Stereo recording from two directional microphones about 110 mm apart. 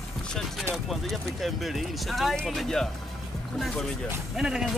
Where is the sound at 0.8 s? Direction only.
Centre (ahead or behind).